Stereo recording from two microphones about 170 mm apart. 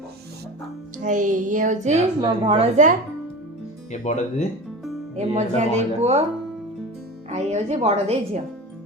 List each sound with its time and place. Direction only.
1.0 s speech: 50° right (ahead or behind)
2.2 s speech: 30° right (ahead or behind)
4.0 s speech: 45° left (ahead or behind)
5.1 s speech: 45° right (ahead or behind)
7.3 s speech: 40° right (ahead or behind)